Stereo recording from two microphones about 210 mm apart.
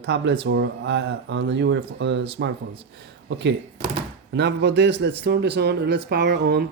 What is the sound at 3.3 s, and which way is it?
Speech, 60° right (ahead or behind).